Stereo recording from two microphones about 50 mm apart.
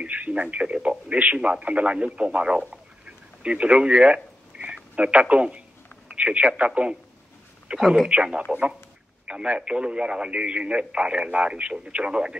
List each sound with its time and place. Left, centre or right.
0.0 s speech: right
2.7 s a sound: right
4.9 s speech: right
7.8 s speech: centre
8.1 s speech: right